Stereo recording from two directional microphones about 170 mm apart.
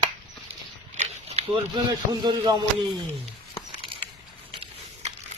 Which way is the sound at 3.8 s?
30° right (ahead or behind).